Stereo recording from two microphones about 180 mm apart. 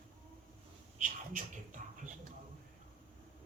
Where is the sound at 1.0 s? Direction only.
45° right (ahead or behind).